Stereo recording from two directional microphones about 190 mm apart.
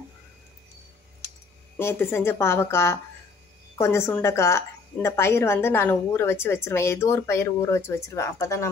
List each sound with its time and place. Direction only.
1.8 s a woman's voice: 15° left (ahead or behind)